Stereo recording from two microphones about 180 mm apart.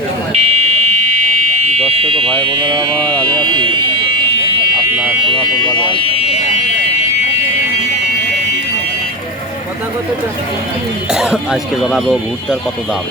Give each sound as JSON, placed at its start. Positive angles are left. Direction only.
{"t": 0.3, "sound": "buzzer", "side_deg": -35}
{"t": 1.7, "sound": "fire alarm", "side_deg": -35}
{"t": 2.4, "sound": "speech", "side_deg": -25}
{"t": 5.3, "sound": "speech", "side_deg": 25}
{"t": 6.1, "sound": "fire alarm", "side_deg": 35}
{"t": 11.1, "sound": "speech", "side_deg": -5}